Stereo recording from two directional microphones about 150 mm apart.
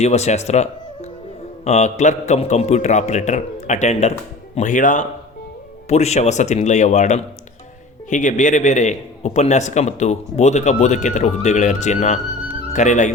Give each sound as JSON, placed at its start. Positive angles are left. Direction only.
{"t": 0.0, "sound": "a man's voice", "side_deg": 50}
{"t": 5.9, "sound": "a man's voice", "side_deg": 45}